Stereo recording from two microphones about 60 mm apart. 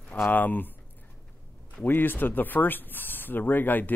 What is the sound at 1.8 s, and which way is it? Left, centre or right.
Speech, left.